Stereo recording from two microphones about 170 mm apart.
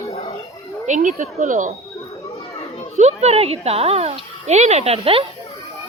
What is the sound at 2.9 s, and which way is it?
Speech, 40° right (ahead or behind).